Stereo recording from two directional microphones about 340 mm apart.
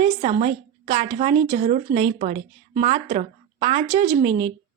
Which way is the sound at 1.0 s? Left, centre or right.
Centre.